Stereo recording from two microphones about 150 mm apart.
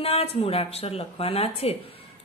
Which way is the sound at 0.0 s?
40° left (ahead or behind).